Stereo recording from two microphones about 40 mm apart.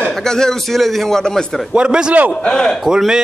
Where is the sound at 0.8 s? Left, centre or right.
Centre.